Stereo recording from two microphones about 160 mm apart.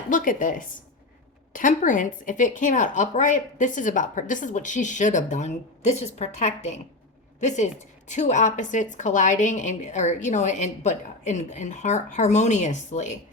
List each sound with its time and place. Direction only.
0.1 s a woman's voice: 55° left (ahead or behind)